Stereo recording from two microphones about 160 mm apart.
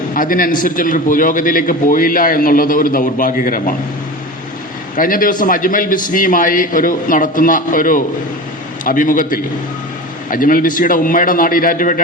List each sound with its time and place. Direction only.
0.1 s a man's voice: 60° left (ahead or behind)
4.9 s a man's voice: 60° left (ahead or behind)